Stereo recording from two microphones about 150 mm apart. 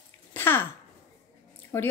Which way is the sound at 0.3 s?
15° left (ahead or behind).